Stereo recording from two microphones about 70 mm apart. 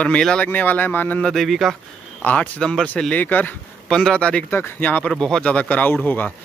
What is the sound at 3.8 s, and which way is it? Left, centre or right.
Speech, centre.